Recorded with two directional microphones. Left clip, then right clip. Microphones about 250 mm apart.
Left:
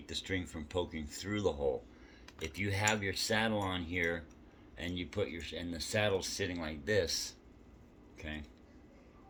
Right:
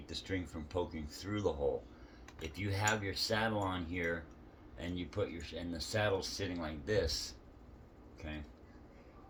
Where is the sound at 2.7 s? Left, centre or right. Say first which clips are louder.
Left 1 dB; left.